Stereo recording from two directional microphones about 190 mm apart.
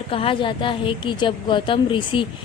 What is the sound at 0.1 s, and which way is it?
A woman's voice, 30° left (ahead or behind).